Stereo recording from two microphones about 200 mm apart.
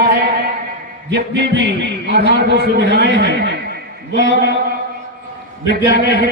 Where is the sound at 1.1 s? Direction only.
60° right (ahead or behind).